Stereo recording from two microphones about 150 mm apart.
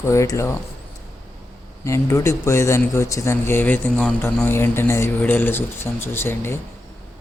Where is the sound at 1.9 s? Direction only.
20° left (ahead or behind).